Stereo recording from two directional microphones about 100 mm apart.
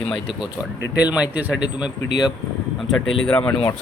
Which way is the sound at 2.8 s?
5° left (ahead or behind).